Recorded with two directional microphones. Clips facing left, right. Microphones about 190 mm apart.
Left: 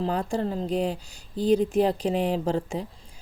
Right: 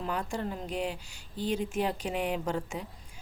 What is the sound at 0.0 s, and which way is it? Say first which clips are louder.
Speech: left 7 dB; 35° left (ahead or behind).